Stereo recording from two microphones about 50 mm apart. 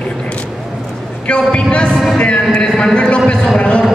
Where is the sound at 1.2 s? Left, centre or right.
Left.